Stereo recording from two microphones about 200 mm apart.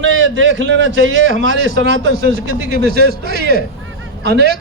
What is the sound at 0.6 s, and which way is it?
A man's voice, 65° right (ahead or behind).